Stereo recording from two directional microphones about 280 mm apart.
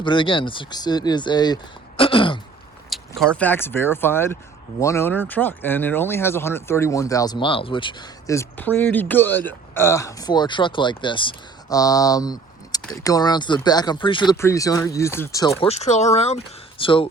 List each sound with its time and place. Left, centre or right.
0.0 s speech: centre
2.0 s throat clearing: centre
3.2 s speech: centre
15.6 s speech: left